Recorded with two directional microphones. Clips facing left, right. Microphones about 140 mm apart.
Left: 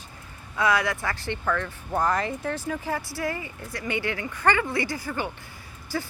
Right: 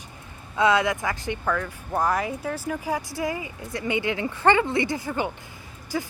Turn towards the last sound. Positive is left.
turn(degrees=-15)  # may be behind; listen again after turning